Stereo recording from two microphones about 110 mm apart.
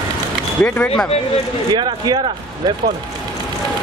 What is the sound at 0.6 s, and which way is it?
Speech, 15° left (ahead or behind).